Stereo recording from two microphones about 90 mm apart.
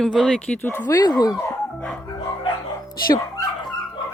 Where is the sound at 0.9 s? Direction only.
45° left (ahead or behind).